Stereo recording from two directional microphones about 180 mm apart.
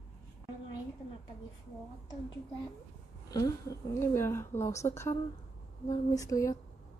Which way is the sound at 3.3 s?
20° left (ahead or behind).